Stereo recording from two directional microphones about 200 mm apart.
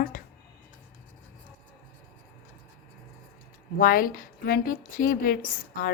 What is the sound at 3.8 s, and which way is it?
A woman's voice, 45° left (ahead or behind).